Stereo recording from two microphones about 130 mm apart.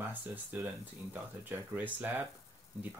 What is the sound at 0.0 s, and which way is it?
Speech, 15° right (ahead or behind).